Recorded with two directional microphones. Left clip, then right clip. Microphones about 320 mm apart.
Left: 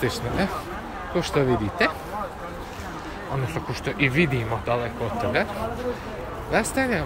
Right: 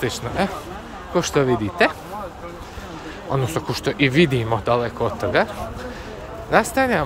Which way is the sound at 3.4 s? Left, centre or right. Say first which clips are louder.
Right 5 dB; centre.